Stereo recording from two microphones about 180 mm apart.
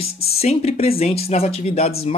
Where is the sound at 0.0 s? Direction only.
35° left (ahead or behind).